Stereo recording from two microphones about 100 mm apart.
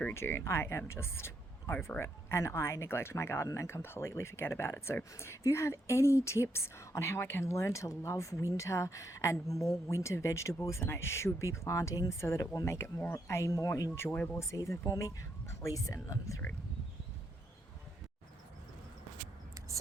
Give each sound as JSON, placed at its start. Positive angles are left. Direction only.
{"t": 0.1, "sound": "speech", "side_deg": 25}